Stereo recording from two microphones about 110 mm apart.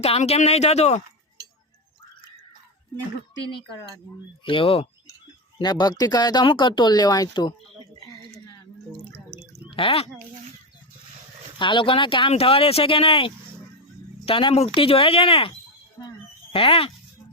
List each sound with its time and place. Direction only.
0.0 s speech: 70° left (ahead or behind); by 1.0 s 85° left
4.4 s speech: 55° left (ahead or behind)
5.5 s speech: 40° left (ahead or behind)
9.6 s speech: 55° left (ahead or behind)
11.6 s speech: 50° left (ahead or behind)
16.0 s a sound: 25° left (ahead or behind)
16.5 s speech: 60° left (ahead or behind)